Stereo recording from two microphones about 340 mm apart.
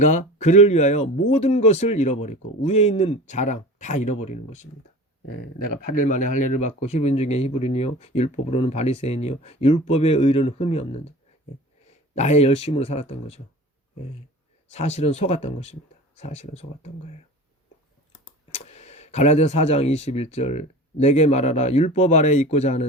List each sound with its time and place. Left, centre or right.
0.0 s speech: left
12.1 s speech: centre
14.7 s speech: centre
18.5 s speech: centre